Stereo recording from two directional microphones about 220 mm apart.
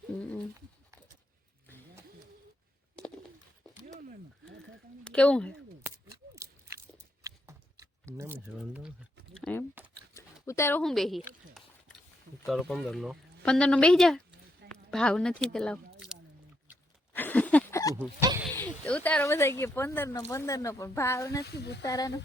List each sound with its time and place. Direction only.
0.2 s bird: 5° left (ahead or behind)
5.0 s speech: 5° left (ahead or behind)
5.8 s a sound: 15° right (ahead or behind)
8.0 s speech: 10° right (ahead or behind)
9.3 s typing: 5° left (ahead or behind)
10.4 s speech: 10° left (ahead or behind)
12.5 s speech: centre (ahead or behind)
17.2 s a sound: 5° left (ahead or behind)
18.5 s speech: 5° left (ahead or behind)
21.4 s speech: 50° left (ahead or behind)
21.8 s speech: 15° left (ahead or behind)